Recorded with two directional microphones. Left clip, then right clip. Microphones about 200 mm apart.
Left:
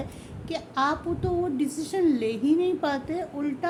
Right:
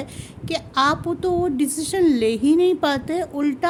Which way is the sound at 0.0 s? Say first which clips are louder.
Right 4 dB; 55° right (ahead or behind).